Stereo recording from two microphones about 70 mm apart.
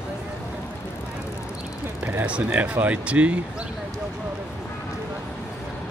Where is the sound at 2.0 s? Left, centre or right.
Right.